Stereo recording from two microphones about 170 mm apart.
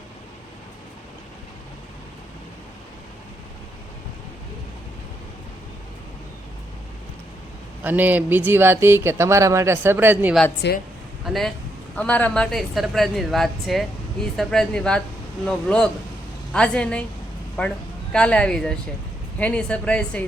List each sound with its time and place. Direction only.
7.9 s speech: 10° right (ahead or behind)
10.6 s speech: 90° left
11.3 s a woman's voice: centre (ahead or behind)